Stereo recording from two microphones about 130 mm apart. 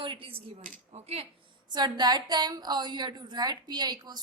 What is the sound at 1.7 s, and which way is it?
A woman's voice, 35° right (ahead or behind).